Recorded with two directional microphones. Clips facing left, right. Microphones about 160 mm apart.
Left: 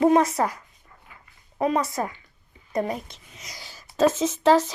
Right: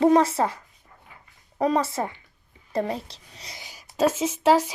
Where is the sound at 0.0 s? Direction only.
30° right (ahead or behind).